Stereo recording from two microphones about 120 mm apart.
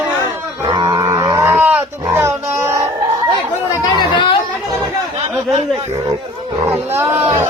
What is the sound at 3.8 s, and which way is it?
Chatter, 40° left (ahead or behind).